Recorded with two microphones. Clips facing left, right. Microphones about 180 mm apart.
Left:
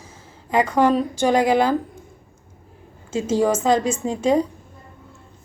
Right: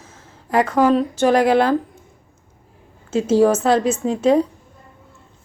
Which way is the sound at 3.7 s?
5° right (ahead or behind).